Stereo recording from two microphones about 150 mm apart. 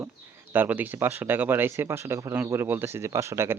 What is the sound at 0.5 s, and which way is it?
Speech, 10° right (ahead or behind).